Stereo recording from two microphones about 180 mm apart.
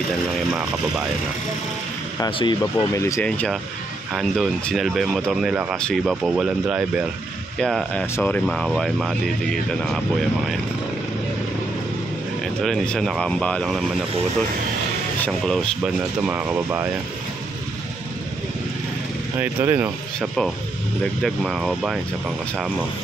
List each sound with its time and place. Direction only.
0.5 s speech: centre (ahead or behind)
2.1 s speech: 25° left (ahead or behind)
3.3 s speech: 5° left (ahead or behind)
12.6 s speech: centre (ahead or behind)
15.2 s speech: 5° left (ahead or behind)
19.4 s speech: 10° right (ahead or behind)
21.2 s speech: centre (ahead or behind)